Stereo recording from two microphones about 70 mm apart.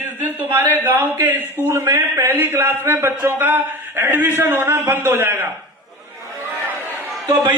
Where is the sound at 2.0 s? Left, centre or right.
Right.